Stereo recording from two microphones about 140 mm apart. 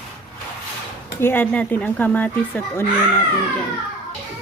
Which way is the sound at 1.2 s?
15° left (ahead or behind).